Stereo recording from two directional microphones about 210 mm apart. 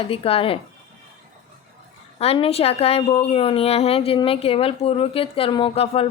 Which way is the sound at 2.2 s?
30° left (ahead or behind).